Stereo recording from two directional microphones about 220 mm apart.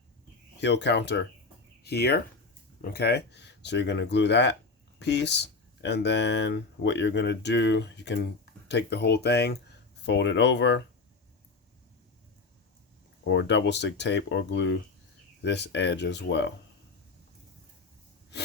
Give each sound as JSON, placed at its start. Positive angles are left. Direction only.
{"t": 0.6, "sound": "speech", "side_deg": 50}
{"t": 13.2, "sound": "speech", "side_deg": 55}